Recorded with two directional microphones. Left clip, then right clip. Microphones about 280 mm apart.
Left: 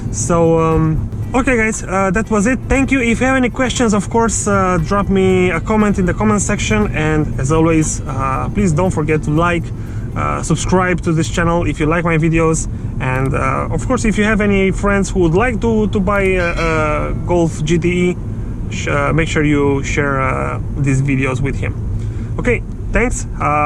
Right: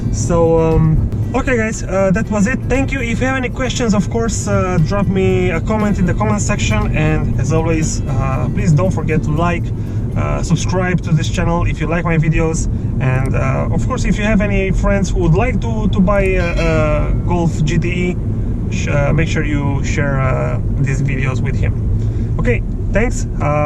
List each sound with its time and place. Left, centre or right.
0.3 s speech: left
16.4 s speech: centre
16.7 s speech: left